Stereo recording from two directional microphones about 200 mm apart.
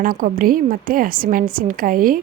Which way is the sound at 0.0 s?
45° right (ahead or behind).